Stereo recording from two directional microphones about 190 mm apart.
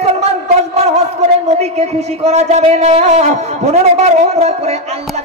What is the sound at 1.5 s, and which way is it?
Speech, 35° right (ahead or behind).